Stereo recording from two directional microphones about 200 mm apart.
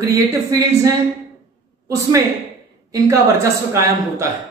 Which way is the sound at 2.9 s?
15° right (ahead or behind).